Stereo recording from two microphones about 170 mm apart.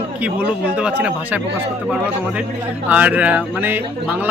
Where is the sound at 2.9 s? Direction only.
10° right (ahead or behind).